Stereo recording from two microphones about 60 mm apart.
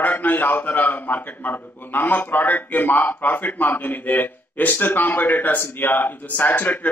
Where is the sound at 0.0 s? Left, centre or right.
Left.